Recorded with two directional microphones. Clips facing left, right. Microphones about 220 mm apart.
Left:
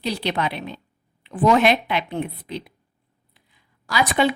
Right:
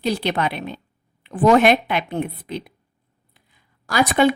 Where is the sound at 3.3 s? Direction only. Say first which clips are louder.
Right 1 dB; 50° right (ahead or behind).